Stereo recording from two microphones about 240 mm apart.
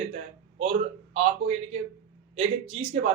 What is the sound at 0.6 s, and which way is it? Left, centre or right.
A man's voice, right.